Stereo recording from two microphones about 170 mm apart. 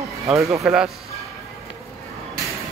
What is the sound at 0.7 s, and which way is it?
Speech, 5° right (ahead or behind).